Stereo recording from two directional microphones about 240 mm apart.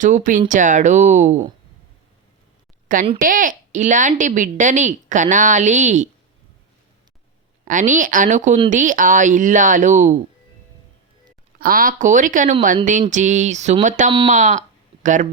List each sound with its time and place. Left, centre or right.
0.0 s a woman's voice: right
3.2 s a woman's voice: right
7.6 s a woman's voice: right
11.6 s a woman's voice: right